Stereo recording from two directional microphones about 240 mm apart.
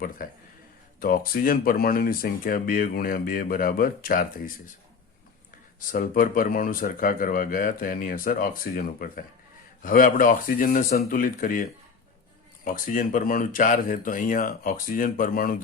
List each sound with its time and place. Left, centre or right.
0.9 s speech: left
5.9 s speech: left